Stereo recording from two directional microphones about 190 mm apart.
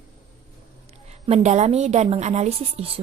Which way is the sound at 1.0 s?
35° right (ahead or behind).